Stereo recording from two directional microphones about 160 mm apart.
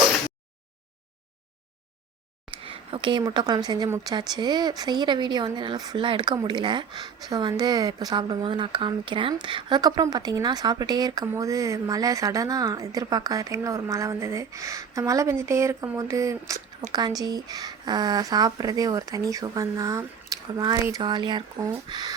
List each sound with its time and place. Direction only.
2.5 s speech: 35° right (ahead or behind)